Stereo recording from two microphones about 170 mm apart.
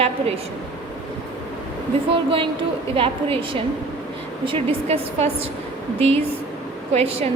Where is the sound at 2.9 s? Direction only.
35° right (ahead or behind).